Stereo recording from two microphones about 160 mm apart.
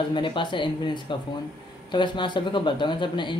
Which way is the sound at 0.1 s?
30° left (ahead or behind).